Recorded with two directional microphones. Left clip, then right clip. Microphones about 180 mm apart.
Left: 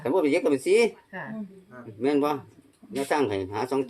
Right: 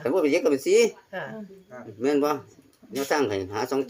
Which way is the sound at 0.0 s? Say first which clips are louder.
Right 1 dB; 5° right (ahead or behind).